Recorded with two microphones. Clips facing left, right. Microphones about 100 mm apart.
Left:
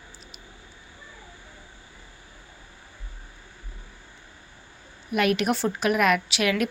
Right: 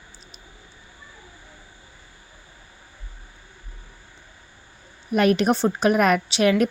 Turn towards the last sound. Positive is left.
turn(degrees=-35)  # may be behind; listen again after turning